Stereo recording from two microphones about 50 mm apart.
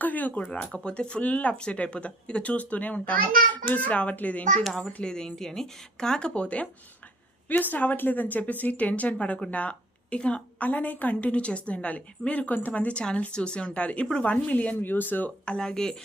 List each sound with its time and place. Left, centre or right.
0.0 s a woman's voice: left
5.0 s speech: centre
7.4 s a woman's voice: left
15.4 s speech: centre